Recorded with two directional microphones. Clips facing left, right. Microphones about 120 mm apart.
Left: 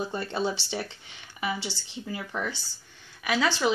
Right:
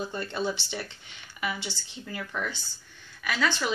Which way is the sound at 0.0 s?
25° left (ahead or behind).